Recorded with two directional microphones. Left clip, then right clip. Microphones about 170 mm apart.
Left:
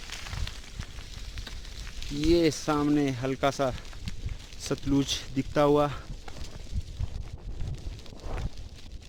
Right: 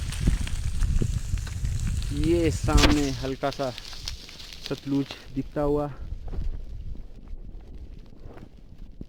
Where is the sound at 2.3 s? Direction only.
10° left (ahead or behind); by 6.0 s 30° left (ahead or behind).